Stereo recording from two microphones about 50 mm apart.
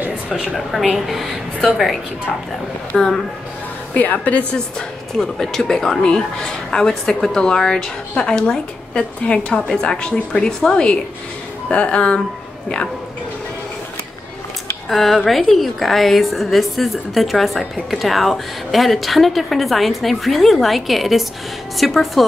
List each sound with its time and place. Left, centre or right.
0.6 s a woman's voice: centre
2.9 s a woman's voice: centre
3.9 s a woman's voice: left
4.6 s a woman's voice: centre
14.9 s a woman's voice: centre